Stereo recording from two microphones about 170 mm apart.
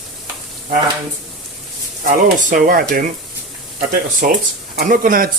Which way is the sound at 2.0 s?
50° right (ahead or behind).